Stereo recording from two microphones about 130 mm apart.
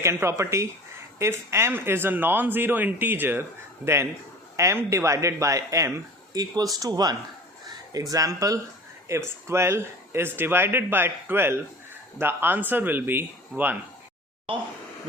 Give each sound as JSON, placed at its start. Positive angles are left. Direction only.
{"t": 0.0, "sound": "speech", "side_deg": -20}
{"t": 4.5, "sound": "speech", "side_deg": -20}